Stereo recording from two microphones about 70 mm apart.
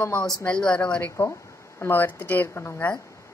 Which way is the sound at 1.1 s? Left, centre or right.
Left.